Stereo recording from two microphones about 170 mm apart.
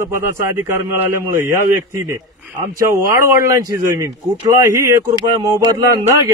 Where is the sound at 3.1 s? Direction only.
20° right (ahead or behind).